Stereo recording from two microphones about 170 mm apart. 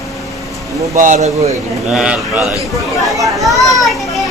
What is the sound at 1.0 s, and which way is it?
Speech, 45° right (ahead or behind).